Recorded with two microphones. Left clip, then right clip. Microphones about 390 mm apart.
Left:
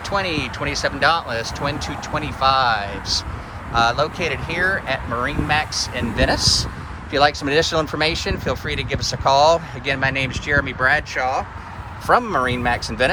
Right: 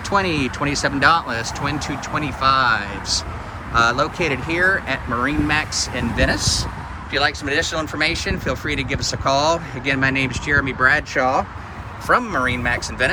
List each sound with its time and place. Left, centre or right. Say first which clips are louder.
0.1 s speech: right 3 dB; centre